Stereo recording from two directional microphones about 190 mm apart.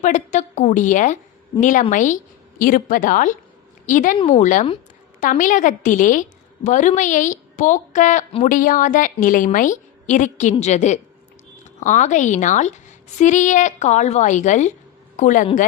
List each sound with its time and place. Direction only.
0.0 s a woman's voice: 40° left (ahead or behind)